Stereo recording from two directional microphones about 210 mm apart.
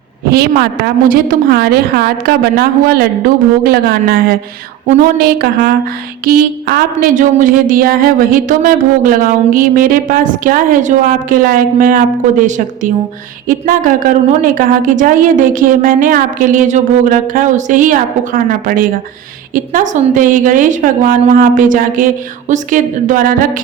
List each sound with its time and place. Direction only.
0.3 s a woman's voice: 45° right (ahead or behind)